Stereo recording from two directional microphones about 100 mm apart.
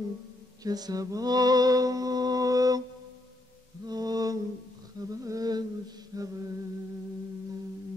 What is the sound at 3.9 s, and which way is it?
Music, 40° right (ahead or behind).